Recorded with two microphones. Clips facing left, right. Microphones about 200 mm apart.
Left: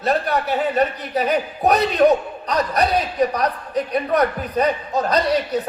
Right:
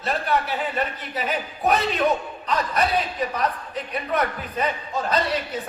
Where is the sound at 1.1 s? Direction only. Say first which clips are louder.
Left 7 dB; 40° left (ahead or behind).